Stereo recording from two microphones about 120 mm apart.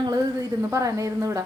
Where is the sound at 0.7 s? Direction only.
25° right (ahead or behind).